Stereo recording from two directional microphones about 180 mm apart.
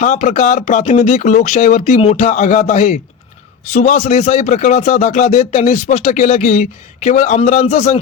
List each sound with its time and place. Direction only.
0.0 s speech: 45° left (ahead or behind)